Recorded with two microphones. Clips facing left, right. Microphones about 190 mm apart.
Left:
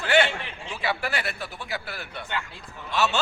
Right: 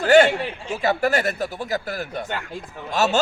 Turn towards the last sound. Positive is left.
turn(degrees=-40)  # may be behind; listen again after turning